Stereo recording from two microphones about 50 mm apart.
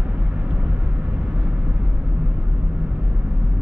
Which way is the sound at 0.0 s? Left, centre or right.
Right.